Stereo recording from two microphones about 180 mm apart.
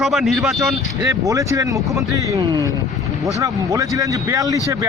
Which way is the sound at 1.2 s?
20° right (ahead or behind).